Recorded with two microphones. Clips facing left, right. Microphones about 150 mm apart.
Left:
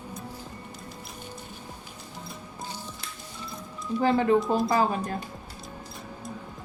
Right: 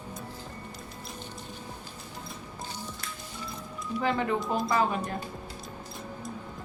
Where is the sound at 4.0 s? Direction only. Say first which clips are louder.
Left 6 dB; 35° left (ahead or behind).